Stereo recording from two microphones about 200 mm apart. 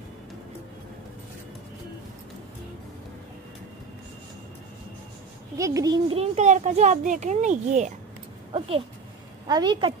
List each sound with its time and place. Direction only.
5.6 s a child's voice: 15° right (ahead or behind)
6.1 s a child's voice: 35° right (ahead or behind)